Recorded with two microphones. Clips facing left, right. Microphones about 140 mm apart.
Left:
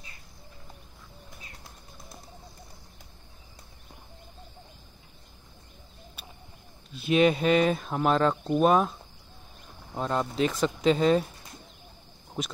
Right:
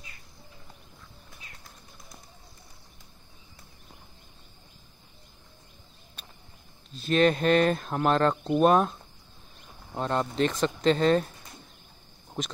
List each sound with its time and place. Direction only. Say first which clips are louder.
6.2 s vehicle: left 2 dB; 5° left (ahead or behind)
6.9 s speech: left 1 dB; 10° left (ahead or behind)
9.9 s speech: right 1 dB; centre (ahead or behind)
12.4 s speech: even; centre (ahead or behind)